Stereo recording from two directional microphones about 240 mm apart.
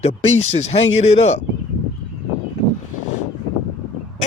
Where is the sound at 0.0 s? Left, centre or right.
Left.